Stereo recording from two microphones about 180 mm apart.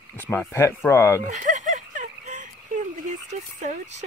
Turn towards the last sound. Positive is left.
turn(degrees=-40)  # may be behind; listen again after turning